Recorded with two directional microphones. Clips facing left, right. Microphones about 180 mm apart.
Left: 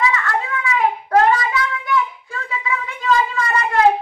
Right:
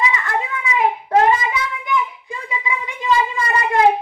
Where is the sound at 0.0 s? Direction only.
20° right (ahead or behind).